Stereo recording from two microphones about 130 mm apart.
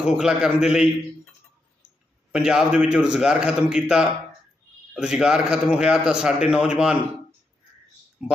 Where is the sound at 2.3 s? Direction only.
5° right (ahead or behind).